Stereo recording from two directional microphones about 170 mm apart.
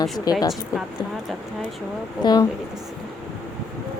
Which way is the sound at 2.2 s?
25° left (ahead or behind).